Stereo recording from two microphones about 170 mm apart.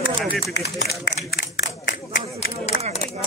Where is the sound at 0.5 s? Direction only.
85° left.